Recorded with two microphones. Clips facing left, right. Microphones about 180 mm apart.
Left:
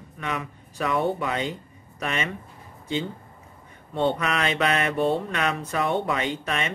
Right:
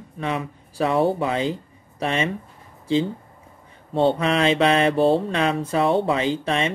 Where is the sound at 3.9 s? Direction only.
30° right (ahead or behind).